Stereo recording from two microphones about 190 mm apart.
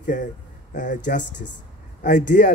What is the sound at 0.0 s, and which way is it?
Speech, 45° left (ahead or behind).